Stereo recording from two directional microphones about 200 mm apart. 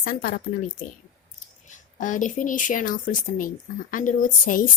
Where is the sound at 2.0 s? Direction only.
40° left (ahead or behind).